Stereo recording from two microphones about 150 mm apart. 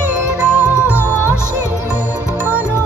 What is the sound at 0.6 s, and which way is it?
Music, 20° left (ahead or behind).